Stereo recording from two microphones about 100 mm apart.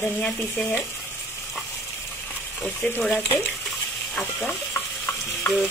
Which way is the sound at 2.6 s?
20° left (ahead or behind).